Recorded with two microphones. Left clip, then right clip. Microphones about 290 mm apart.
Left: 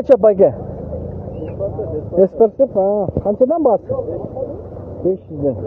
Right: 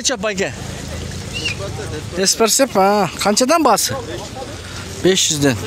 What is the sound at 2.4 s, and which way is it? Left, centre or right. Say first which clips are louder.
Speech: left 1 dB; right.